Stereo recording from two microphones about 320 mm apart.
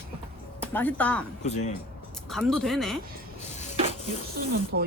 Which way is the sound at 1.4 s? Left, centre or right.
Left.